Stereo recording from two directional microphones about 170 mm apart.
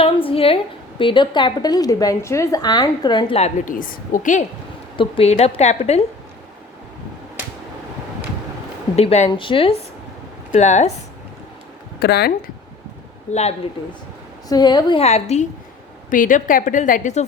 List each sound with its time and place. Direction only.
0.0 s a woman's voice: 30° left (ahead or behind)
3.7 s a woman's voice: 55° left (ahead or behind)
4.9 s a woman's voice: 35° left (ahead or behind)
9.0 s a woman's voice: 40° left (ahead or behind)
10.5 s a woman's voice: 45° left (ahead or behind)
11.9 s speech: 70° left (ahead or behind)
13.3 s a woman's voice: 40° left (ahead or behind)
14.5 s a woman's voice: 25° left (ahead or behind)
15.0 s a woman's voice: 40° left (ahead or behind)
16.0 s a woman's voice: 50° left (ahead or behind)